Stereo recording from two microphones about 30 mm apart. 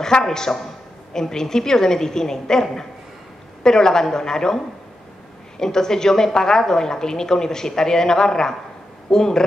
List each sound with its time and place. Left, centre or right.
0.0 s a woman's voice: centre
5.6 s a woman's voice: centre